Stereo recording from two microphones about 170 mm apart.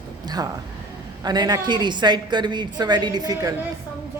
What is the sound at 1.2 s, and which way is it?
A woman's voice, 25° right (ahead or behind).